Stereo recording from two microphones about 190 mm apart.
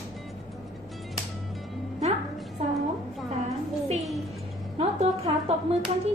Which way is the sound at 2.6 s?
35° right (ahead or behind).